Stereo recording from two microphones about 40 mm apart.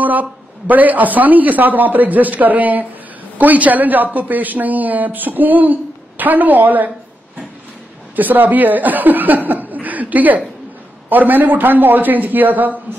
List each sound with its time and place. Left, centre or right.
0.0 s a woman's voice: right
8.2 s a woman's voice: right